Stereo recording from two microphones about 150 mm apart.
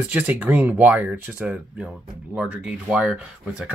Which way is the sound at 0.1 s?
10° right (ahead or behind).